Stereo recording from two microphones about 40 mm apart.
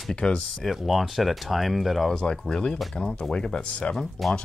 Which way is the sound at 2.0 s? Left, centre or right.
Centre.